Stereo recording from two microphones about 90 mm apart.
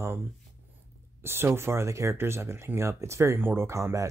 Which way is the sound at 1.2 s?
25° right (ahead or behind).